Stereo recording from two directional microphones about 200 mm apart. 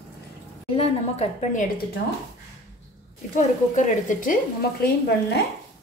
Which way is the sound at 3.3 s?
35° left (ahead or behind).